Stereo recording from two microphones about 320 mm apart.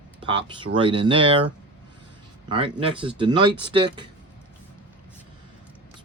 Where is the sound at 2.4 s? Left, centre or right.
Centre.